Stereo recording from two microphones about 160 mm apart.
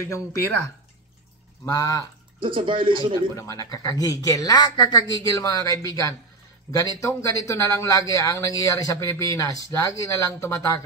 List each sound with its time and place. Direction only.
0.0 s speech: 15° left (ahead or behind)
1.7 s speech: 20° left (ahead or behind)
2.4 s speech: 30° right (ahead or behind)
3.3 s speech: 20° left (ahead or behind)